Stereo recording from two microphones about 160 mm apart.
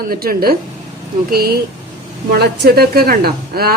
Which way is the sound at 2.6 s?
70° right (ahead or behind).